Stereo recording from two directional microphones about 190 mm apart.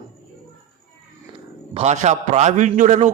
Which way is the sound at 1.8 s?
35° right (ahead or behind).